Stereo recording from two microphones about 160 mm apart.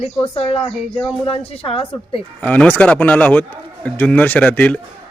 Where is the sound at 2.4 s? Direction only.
10° left (ahead or behind).